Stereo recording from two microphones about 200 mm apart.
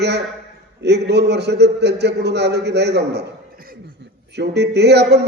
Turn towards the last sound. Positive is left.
turn(degrees=-55)  # may be behind; listen again after turning